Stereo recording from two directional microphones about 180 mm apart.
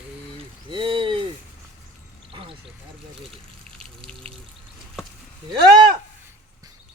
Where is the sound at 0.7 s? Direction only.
25° right (ahead or behind).